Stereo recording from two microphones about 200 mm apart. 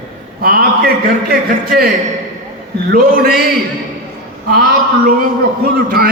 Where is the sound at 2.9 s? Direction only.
45° right (ahead or behind).